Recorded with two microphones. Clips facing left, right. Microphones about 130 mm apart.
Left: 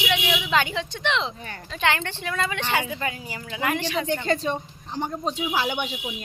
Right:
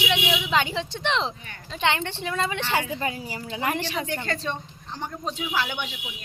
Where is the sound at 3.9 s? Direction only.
20° left (ahead or behind).